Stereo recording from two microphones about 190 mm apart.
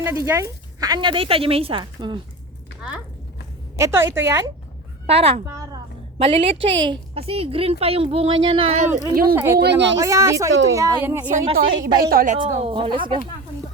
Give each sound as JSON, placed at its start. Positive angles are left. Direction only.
{"t": 0.0, "sound": "speech", "side_deg": -10}
{"t": 3.8, "sound": "a woman's voice", "side_deg": -15}
{"t": 5.0, "sound": "a woman's voice", "side_deg": -30}
{"t": 5.5, "sound": "a sound", "side_deg": -15}
{"t": 6.1, "sound": "a woman's voice", "side_deg": -30}
{"t": 9.3, "sound": "a woman's voice", "side_deg": -10}
{"t": 9.6, "sound": "speech", "side_deg": -65}
{"t": 10.0, "sound": "a woman's voice", "side_deg": -15}
{"t": 11.5, "sound": "a woman's voice", "side_deg": -45}
{"t": 12.4, "sound": "speech", "side_deg": -25}